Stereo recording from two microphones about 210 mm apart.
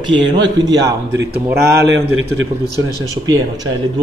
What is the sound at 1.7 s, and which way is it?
Speech, 65° right (ahead or behind).